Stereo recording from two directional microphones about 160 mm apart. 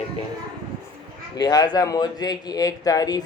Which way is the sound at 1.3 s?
25° left (ahead or behind).